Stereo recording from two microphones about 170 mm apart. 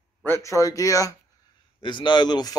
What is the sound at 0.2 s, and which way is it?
Speech, 15° left (ahead or behind).